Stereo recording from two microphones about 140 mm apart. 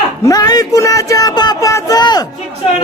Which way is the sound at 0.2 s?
25° left (ahead or behind).